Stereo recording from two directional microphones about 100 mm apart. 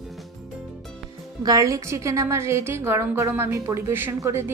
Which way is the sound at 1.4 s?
35° right (ahead or behind).